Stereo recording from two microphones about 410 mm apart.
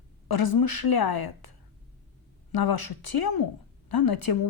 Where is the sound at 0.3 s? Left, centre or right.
Left.